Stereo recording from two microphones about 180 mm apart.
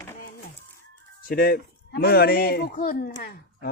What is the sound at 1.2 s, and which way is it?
A man's voice, 55° left (ahead or behind).